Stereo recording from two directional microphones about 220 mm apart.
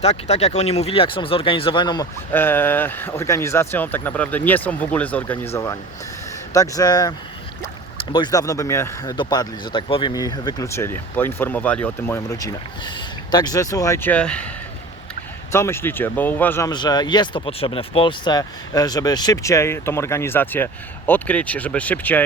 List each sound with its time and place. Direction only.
0.0 s speech: 30° left (ahead or behind)
2.3 s speech: 10° left (ahead or behind)
6.5 s speech: 15° left (ahead or behind)
8.1 s speech: 20° left (ahead or behind)
15.5 s speech: 10° left (ahead or behind)